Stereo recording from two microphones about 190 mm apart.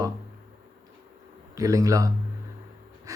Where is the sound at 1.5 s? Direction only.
15° right (ahead or behind).